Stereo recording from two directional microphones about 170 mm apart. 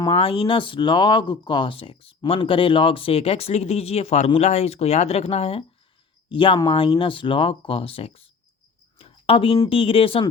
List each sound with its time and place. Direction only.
0.1 s speech: 35° left (ahead or behind)
9.0 s a sound: 35° left (ahead or behind)
9.6 s speech: 35° left (ahead or behind)